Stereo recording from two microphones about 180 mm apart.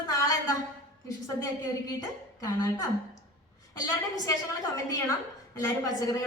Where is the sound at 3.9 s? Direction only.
20° left (ahead or behind).